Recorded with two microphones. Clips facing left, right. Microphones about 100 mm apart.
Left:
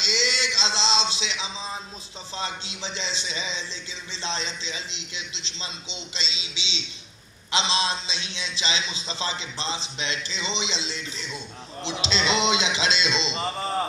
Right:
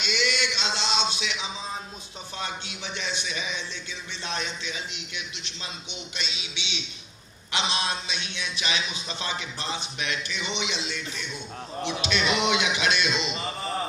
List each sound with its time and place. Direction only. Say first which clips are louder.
0.0 s a sound: even; 30° left (ahead or behind)
2.3 s a man's voice: left 2 dB; 25° left (ahead or behind)
7.5 s a man's voice: left 3 dB; 30° left (ahead or behind)